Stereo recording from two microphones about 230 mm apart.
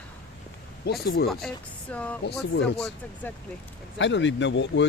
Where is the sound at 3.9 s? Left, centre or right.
Left.